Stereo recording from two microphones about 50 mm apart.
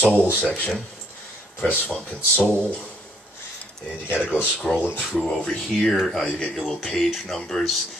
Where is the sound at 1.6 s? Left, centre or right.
Left.